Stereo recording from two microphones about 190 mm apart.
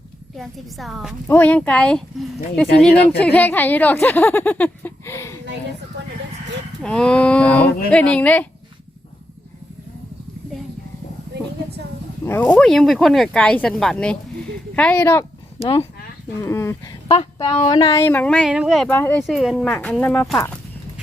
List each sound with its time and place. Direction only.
0.3 s speech: centre (ahead or behind)
3.2 s speech: 10° left (ahead or behind)
6.8 s speech: 5° left (ahead or behind)
12.2 s speech: 10° left (ahead or behind)
15.6 s speech: 30° left (ahead or behind)
16.4 s speech: 15° left (ahead or behind)
17.2 s speech: 25° left (ahead or behind); by 20.4 s 5° left (ahead or behind)